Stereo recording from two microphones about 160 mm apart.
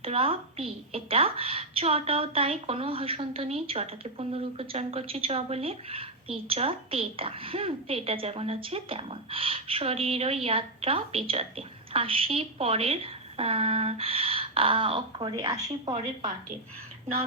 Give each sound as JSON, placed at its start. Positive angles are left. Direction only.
{"t": 0.0, "sound": "a woman's voice", "side_deg": -35}